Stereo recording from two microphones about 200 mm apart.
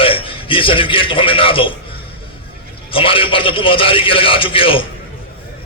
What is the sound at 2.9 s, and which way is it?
A man's voice, 25° left (ahead or behind).